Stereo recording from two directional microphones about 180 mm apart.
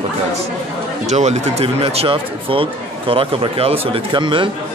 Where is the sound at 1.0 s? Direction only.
40° right (ahead or behind).